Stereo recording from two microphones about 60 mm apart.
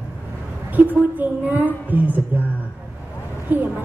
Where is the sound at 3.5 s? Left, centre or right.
Right.